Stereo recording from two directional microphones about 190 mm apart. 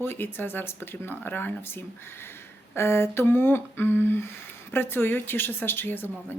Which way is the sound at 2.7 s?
15° left (ahead or behind).